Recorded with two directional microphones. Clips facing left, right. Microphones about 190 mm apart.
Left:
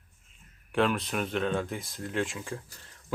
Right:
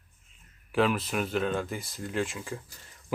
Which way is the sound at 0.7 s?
Centre (ahead or behind).